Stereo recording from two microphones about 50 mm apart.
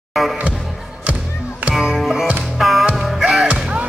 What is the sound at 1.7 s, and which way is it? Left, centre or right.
Music, centre.